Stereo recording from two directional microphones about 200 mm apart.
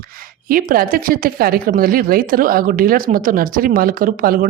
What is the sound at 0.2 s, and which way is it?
Speech, 45° right (ahead or behind).